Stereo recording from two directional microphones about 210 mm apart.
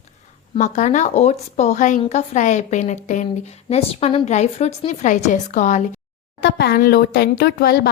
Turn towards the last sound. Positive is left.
turn(degrees=50)  # may be behind; listen again after turning